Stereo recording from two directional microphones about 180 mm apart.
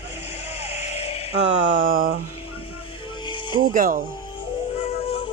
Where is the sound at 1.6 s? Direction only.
45° right (ahead or behind).